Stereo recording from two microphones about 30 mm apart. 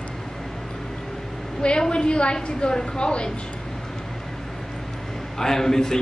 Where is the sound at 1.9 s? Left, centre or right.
Left.